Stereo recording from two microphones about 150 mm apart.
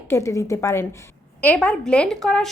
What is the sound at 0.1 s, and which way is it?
A woman's voice, 20° left (ahead or behind).